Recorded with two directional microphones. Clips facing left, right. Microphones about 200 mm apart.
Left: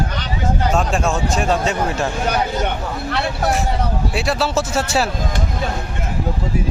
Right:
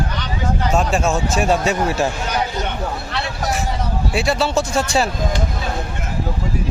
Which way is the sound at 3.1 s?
55° left (ahead or behind).